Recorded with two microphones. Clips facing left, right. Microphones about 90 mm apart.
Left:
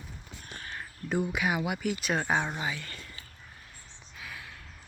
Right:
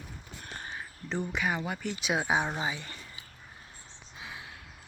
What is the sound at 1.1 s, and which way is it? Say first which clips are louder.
Speech: left 2 dB; 10° left (ahead or behind).